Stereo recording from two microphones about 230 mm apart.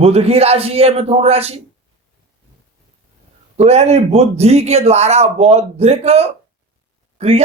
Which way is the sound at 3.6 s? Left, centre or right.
Right.